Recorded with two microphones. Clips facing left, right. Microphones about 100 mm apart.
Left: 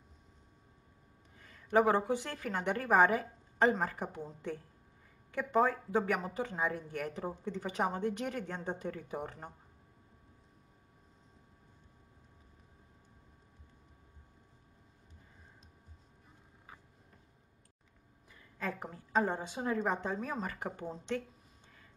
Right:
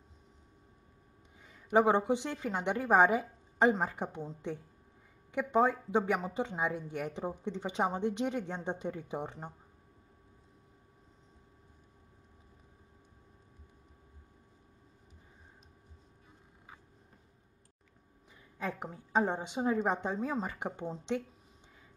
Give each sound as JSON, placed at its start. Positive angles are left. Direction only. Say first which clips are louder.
{"t": 1.4, "sound": "a woman's voice", "louder": "right 1 dB", "side_deg": -15}
{"t": 18.3, "sound": "speech", "louder": "right 1 dB", "side_deg": -20}